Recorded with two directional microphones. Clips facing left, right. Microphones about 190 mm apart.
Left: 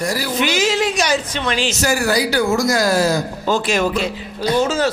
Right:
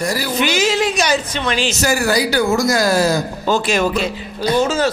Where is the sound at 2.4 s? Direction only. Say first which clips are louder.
Right 1 dB; 30° right (ahead or behind).